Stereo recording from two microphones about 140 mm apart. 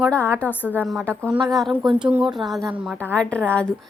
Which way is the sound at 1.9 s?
15° right (ahead or behind).